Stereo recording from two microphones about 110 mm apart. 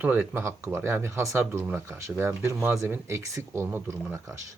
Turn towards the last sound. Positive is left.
turn(degrees=-25)  # may be behind; listen again after turning